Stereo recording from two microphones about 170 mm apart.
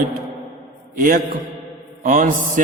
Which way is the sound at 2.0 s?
50° right (ahead or behind).